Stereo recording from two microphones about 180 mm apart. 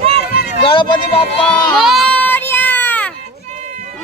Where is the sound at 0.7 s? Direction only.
25° left (ahead or behind).